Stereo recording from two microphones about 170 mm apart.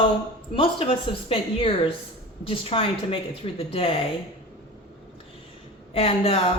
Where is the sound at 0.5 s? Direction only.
30° left (ahead or behind).